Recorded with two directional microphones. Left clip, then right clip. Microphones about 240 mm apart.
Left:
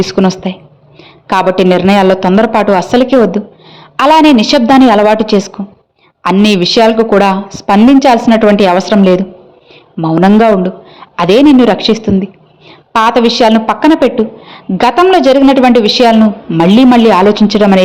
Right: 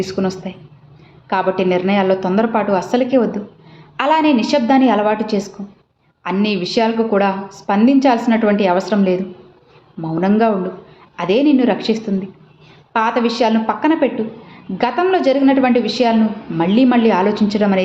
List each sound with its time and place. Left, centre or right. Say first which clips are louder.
0.0 s a woman's voice: left 9 dB; left